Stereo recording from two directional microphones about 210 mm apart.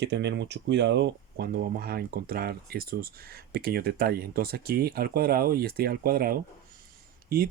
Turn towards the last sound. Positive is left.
turn(degrees=-45)  # may be behind; listen again after turning